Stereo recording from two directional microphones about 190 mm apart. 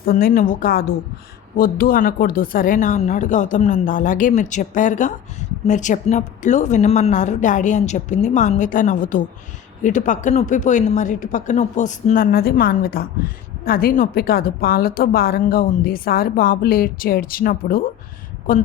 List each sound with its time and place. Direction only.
0.0 s speech: 50° left (ahead or behind)